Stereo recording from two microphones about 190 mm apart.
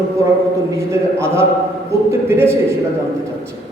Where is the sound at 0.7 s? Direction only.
15° right (ahead or behind).